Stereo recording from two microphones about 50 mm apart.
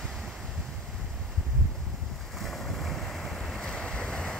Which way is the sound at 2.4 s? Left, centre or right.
Centre.